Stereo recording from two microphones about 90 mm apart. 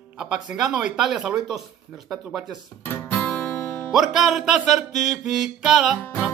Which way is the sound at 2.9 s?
15° left (ahead or behind).